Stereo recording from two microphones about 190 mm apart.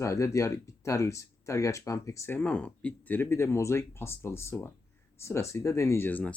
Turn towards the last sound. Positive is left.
turn(degrees=10)  # may be behind; listen again after turning